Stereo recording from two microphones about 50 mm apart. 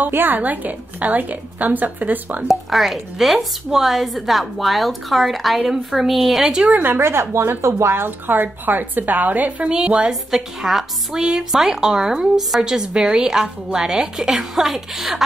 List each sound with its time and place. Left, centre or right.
0.1 s speech: right
2.4 s speech: centre
6.7 s speech: right
9.7 s a woman's voice: centre
10.3 s speech: centre